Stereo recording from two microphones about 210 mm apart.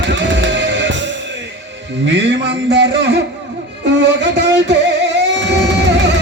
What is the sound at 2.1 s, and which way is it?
Speech, 55° right (ahead or behind).